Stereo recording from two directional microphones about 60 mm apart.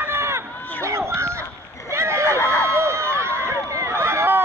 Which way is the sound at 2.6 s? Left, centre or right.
Right.